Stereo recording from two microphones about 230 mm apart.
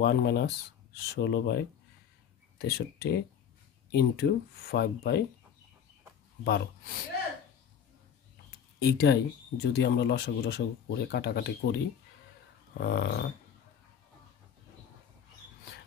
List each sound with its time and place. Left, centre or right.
0.0 s speech: left
2.6 s speech: left
6.4 s speech: left
8.5 s speech: left
12.7 s speech: left